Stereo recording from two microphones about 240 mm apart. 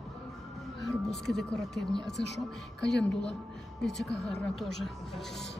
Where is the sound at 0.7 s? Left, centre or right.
Centre.